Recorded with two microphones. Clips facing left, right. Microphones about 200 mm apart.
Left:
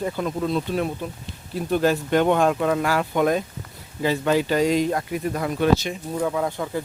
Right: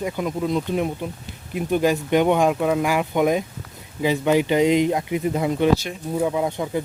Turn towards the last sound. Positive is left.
turn(degrees=-20)  # may be behind; listen again after turning